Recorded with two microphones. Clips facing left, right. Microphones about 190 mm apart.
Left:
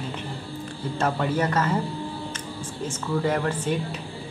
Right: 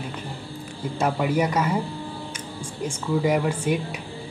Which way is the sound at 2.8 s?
10° right (ahead or behind).